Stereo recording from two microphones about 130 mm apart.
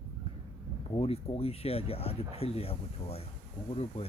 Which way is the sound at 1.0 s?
50° left (ahead or behind).